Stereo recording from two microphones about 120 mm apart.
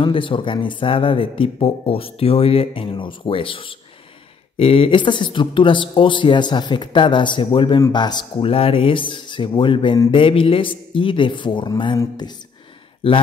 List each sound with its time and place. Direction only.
0.0 s speech: 45° left (ahead or behind)
8.5 s speech: 50° left (ahead or behind)